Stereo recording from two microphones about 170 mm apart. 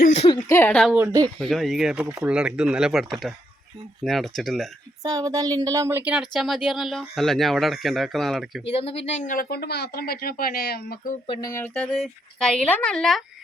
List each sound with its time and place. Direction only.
0.0 s a sound: 40° left (ahead or behind)
0.4 s speech: 15° left (ahead or behind)
0.9 s speech: 15° right (ahead or behind)
1.4 s speech: centre (ahead or behind)
5.0 s speech: 20° right (ahead or behind); by 8.6 s centre (ahead or behind)
8.6 s speech: 35° left (ahead or behind); by 11.2 s 60° left (ahead or behind)
11.3 s speech: 20° left (ahead or behind)
11.6 s speech: 10° left (ahead or behind)